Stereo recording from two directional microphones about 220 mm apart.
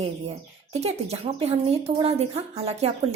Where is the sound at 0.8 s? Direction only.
30° right (ahead or behind).